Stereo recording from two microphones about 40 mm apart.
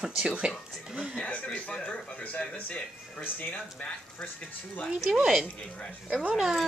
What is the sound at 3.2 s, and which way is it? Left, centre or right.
Speech, left.